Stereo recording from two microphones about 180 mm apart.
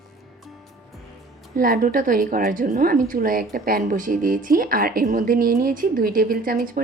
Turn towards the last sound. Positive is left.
turn(degrees=-50)  # may be behind; listen again after turning